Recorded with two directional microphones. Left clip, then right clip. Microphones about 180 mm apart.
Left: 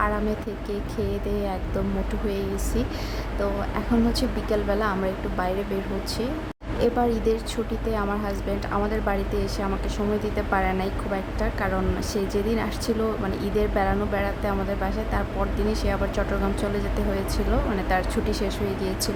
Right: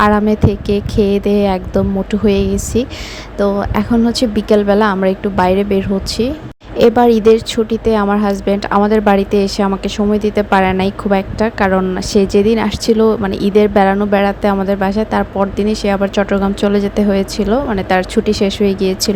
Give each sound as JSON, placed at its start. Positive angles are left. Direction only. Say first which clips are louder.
{"t": 0.0, "sound": "a woman's voice", "louder": "right 14 dB", "side_deg": -45}
{"t": 6.7, "sound": "a woman's voice", "louder": "right 14 dB", "side_deg": -45}